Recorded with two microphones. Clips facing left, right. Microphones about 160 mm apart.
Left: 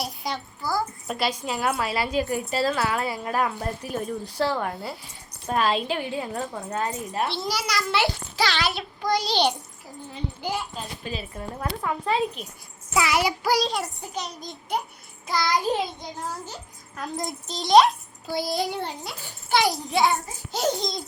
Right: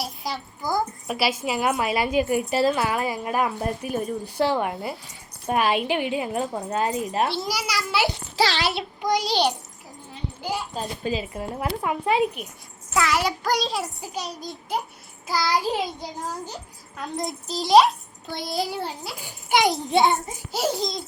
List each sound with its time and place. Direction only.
0.0 s a sound: centre (ahead or behind)
0.6 s a sound: 20° right (ahead or behind)
1.0 s speech: 5° right (ahead or behind)
8.1 s a child's voice: 30° right (ahead or behind)
9.0 s speech: 15° right (ahead or behind)
11.2 s speech: 20° right (ahead or behind)
12.9 s a child's voice: 10° left (ahead or behind); by 20.4 s 25° right (ahead or behind)
20.5 s a child's voice: 5° right (ahead or behind)